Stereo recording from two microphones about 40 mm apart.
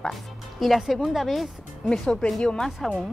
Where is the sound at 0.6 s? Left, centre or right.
Centre.